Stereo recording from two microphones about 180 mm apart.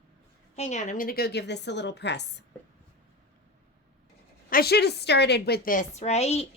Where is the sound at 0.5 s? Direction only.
40° left (ahead or behind); by 2.4 s 75° left (ahead or behind).